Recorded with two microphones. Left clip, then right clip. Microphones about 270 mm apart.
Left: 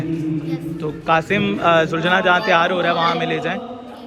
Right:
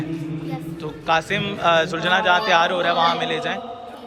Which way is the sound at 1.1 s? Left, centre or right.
Centre.